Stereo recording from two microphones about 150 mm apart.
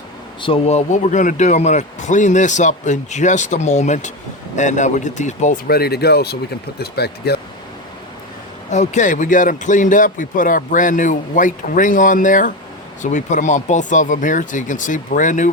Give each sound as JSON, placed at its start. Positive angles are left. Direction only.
{"t": 0.4, "sound": "a man's voice", "side_deg": 40}
{"t": 5.6, "sound": "speech", "side_deg": 90}
{"t": 8.7, "sound": "a man's voice", "side_deg": 50}